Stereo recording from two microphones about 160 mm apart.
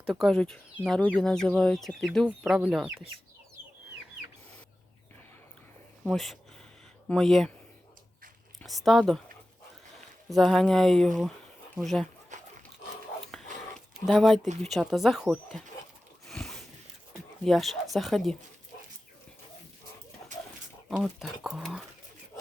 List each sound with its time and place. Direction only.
0.0 s speech: centre (ahead or behind)
6.1 s speech: centre (ahead or behind)
8.6 s speech: centre (ahead or behind)
10.2 s speech: centre (ahead or behind)
12.3 s dog: 50° right (ahead or behind)
13.7 s a sound: centre (ahead or behind)
14.6 s speech: centre (ahead or behind)
16.3 s a sound: centre (ahead or behind)
17.4 s speech: centre (ahead or behind)
20.9 s speech: centre (ahead or behind)